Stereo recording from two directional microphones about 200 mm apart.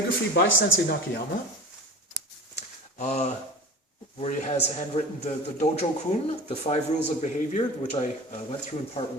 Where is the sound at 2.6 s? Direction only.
35° left (ahead or behind).